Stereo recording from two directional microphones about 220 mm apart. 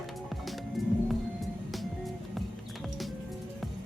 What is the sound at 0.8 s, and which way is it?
Music, centre (ahead or behind).